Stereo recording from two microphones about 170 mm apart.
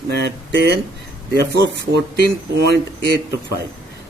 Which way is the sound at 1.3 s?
90° right.